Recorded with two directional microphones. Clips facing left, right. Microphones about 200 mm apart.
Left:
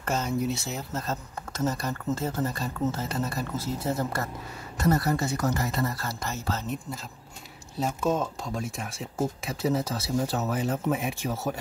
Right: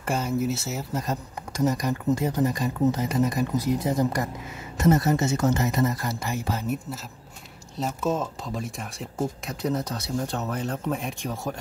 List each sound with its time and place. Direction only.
0.0 s speech: 10° right (ahead or behind)